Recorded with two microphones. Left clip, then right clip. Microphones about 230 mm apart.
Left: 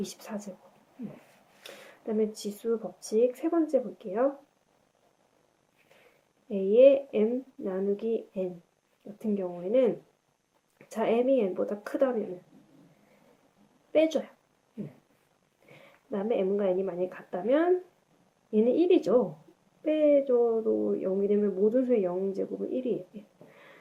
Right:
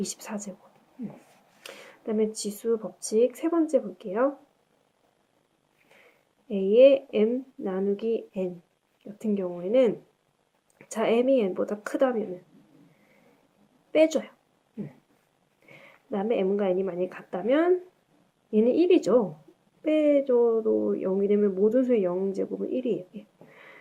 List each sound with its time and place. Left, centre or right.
0.0 s speech: right
1.6 s speech: right
6.5 s speech: right
13.9 s speech: right
15.7 s a woman's voice: right